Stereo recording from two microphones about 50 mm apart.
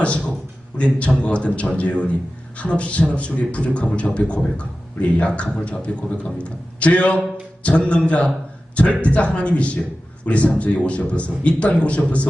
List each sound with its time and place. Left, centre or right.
0.0 s a man's voice: left